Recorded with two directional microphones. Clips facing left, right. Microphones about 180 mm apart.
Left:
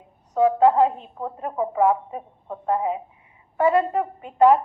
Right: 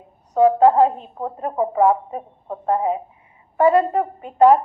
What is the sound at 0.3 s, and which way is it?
A woman's voice, 40° right (ahead or behind).